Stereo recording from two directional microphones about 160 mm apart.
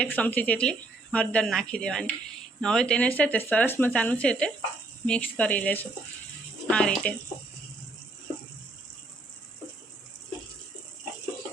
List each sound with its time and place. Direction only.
0.0 s speech: 10° left (ahead or behind)